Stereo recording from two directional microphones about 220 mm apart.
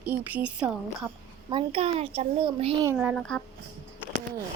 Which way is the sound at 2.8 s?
5° right (ahead or behind).